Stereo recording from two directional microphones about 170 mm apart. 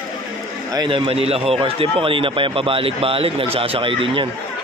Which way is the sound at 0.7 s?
30° right (ahead or behind).